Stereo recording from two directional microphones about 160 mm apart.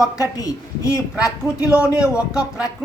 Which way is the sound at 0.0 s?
20° left (ahead or behind).